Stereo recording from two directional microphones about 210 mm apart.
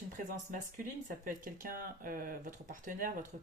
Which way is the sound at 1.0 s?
40° right (ahead or behind).